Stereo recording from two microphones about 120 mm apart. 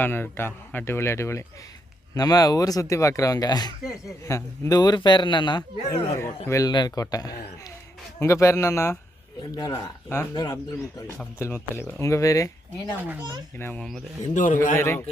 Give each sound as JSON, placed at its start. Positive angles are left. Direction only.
{"t": 0.0, "sound": "speech", "side_deg": 20}
{"t": 4.8, "sound": "speech", "side_deg": 40}
{"t": 6.1, "sound": "speech", "side_deg": 25}
{"t": 9.4, "sound": "speech", "side_deg": 35}
{"t": 14.3, "sound": "a man's voice", "side_deg": 90}
{"t": 14.8, "sound": "speech", "side_deg": 20}